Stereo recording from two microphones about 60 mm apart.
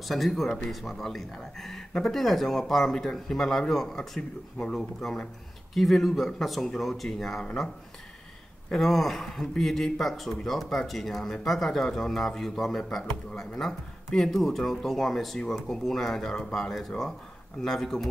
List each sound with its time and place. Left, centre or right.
0.1 s speech: centre
8.7 s speech: centre